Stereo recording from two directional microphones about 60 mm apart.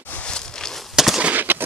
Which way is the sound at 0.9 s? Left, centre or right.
Centre.